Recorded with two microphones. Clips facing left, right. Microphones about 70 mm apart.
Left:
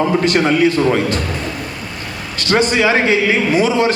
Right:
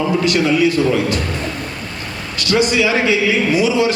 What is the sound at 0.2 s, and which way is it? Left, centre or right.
A man's voice, left.